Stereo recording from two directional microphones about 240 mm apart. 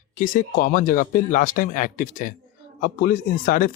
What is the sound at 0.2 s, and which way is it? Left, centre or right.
Speech, left.